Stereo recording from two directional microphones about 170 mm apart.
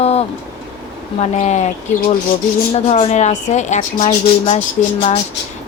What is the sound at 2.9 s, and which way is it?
Speech, 35° left (ahead or behind).